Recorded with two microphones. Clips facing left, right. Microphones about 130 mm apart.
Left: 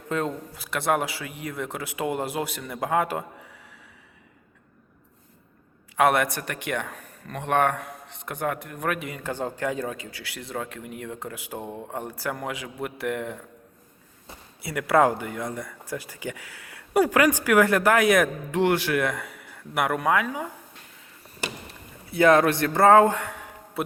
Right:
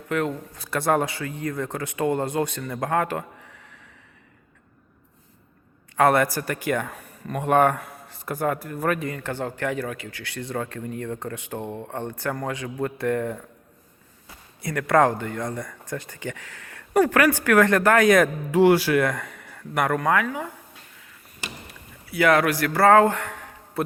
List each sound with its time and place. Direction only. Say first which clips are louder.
0.5 s speech: right 3 dB; centre (ahead or behind)
6.0 s speech: right 2 dB; centre (ahead or behind)
9.1 s speech: right 1 dB; 15° left (ahead or behind)
14.6 s speech: right 1 dB; 5° left (ahead or behind)
18.5 s speech: right 6 dB; 10° right (ahead or behind)
18.9 s speech: right 3 dB; 5° left (ahead or behind)
22.1 s speech: left 1 dB; 25° left (ahead or behind)